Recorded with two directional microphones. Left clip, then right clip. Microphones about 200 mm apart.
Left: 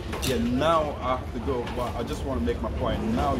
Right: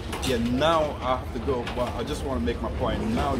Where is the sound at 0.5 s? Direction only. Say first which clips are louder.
Right 1 dB; 40° right (ahead or behind).